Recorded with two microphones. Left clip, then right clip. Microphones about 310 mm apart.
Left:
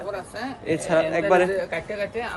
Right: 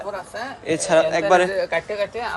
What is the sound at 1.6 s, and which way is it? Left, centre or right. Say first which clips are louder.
Speech: right 5 dB; right.